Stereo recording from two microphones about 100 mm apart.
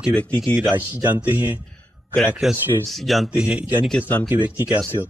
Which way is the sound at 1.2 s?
15° right (ahead or behind).